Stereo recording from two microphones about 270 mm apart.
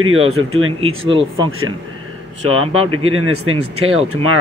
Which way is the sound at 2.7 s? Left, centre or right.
Right.